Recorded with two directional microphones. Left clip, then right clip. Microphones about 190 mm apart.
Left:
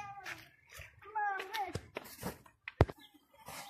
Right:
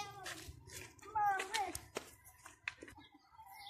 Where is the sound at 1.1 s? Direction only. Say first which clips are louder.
Right 1 dB; 15° right (ahead or behind).